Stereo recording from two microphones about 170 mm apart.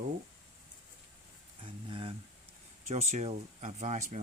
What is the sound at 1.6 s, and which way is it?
Speech, 30° right (ahead or behind).